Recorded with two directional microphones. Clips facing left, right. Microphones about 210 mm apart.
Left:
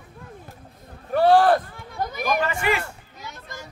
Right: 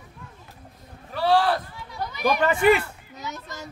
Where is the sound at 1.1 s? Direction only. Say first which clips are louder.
Left 5 dB; 50° left (ahead or behind).